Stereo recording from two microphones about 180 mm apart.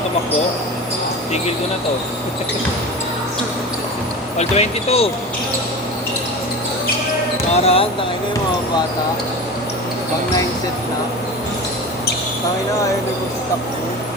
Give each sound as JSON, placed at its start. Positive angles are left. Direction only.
{"t": 4.4, "sound": "speech", "side_deg": 35}
{"t": 7.5, "sound": "speech", "side_deg": 35}